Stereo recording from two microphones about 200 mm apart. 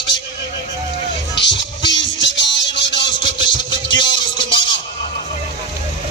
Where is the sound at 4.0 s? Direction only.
25° left (ahead or behind).